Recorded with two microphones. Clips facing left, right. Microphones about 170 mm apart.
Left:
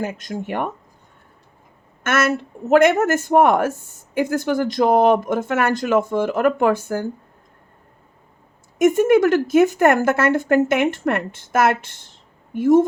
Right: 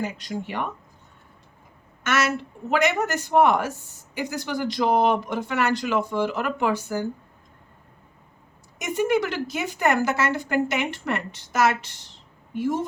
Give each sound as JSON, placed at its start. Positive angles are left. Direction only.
{"t": 0.0, "sound": "speech", "side_deg": 50}
{"t": 2.0, "sound": "speech", "side_deg": 50}
{"t": 8.8, "sound": "speech", "side_deg": 50}